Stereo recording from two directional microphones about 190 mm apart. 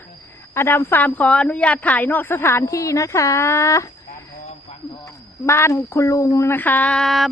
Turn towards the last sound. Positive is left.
turn(degrees=0)  # may be behind; listen again after turning